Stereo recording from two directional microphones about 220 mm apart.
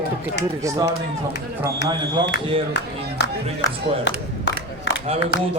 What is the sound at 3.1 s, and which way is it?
Music, 55° left (ahead or behind).